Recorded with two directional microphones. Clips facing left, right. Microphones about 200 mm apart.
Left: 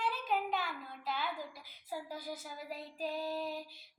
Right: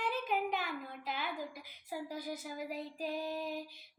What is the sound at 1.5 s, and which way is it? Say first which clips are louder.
A child's voice: even; 15° right (ahead or behind).